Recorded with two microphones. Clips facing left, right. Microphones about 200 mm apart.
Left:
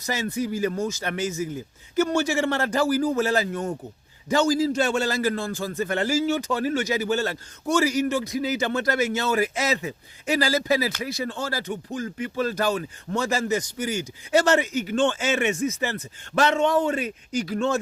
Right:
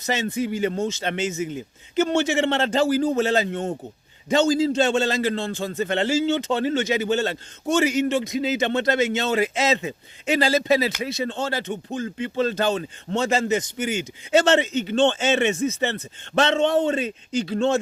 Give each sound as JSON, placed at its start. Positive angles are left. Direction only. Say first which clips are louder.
{"t": 0.0, "sound": "a man's voice", "louder": "right 2 dB", "side_deg": -25}